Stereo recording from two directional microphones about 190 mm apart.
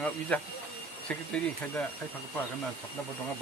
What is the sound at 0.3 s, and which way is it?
Speech, 5° left (ahead or behind).